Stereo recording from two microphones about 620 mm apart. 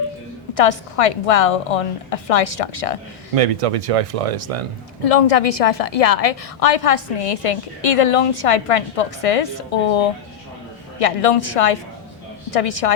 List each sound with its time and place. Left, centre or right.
0.5 s a woman's voice: left
3.3 s speech: right
5.0 s a woman's voice: left